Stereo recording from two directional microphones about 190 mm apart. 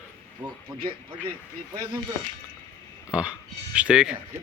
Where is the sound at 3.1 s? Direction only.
5° right (ahead or behind).